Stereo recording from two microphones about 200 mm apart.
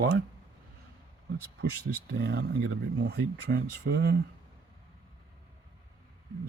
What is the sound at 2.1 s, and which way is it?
Speech, 55° right (ahead or behind).